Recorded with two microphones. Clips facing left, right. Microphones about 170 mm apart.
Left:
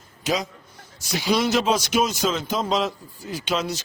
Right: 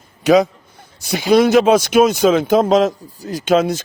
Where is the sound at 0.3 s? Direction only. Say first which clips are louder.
Right 13 dB; 60° right (ahead or behind).